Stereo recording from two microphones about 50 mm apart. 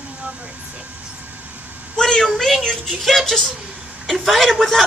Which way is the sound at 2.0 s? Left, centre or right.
Centre.